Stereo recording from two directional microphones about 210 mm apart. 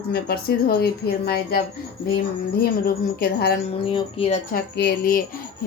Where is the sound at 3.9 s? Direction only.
25° left (ahead or behind).